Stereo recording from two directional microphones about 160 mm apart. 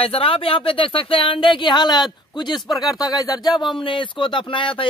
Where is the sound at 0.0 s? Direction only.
35° left (ahead or behind).